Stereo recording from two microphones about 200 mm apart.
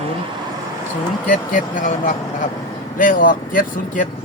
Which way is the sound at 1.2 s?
40° left (ahead or behind).